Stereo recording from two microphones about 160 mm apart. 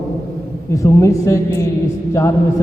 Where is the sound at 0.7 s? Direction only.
20° left (ahead or behind).